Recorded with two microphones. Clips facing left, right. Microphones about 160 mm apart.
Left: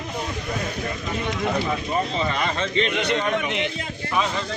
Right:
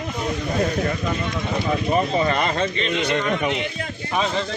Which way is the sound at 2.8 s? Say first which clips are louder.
Even; 65° left (ahead or behind).